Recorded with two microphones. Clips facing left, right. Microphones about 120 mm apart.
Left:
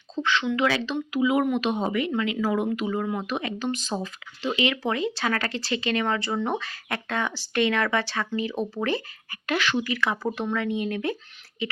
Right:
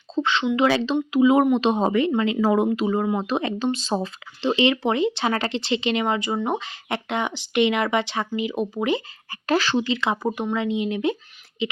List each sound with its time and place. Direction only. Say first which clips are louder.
0.2 s speech: right 4 dB; 25° right (ahead or behind)
9.3 s speech: right 4 dB; 35° right (ahead or behind)